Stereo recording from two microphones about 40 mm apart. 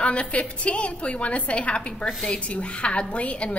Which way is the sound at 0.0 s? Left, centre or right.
Left.